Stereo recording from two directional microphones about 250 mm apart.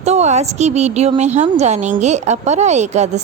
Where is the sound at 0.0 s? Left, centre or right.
Right.